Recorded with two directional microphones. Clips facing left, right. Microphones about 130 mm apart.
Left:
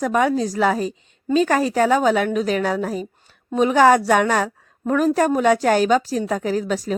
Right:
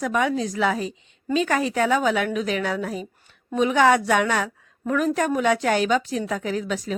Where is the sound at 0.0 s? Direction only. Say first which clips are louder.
Left 4 dB; 40° left (ahead or behind).